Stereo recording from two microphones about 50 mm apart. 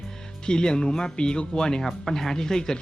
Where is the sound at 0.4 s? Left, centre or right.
Centre.